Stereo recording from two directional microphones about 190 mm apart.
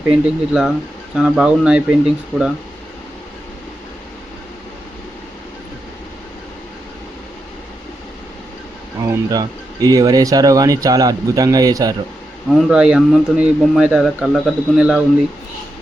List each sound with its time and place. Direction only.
0.1 s speech: centre (ahead or behind)
2.3 s speech: 10° left (ahead or behind)
9.0 s speech: 20° right (ahead or behind)
12.5 s speech: centre (ahead or behind)